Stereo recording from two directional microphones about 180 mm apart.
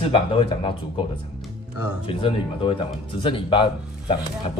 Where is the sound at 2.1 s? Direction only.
30° left (ahead or behind).